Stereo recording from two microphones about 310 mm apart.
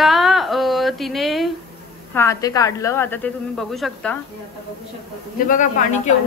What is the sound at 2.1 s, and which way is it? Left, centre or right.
A woman's voice, centre.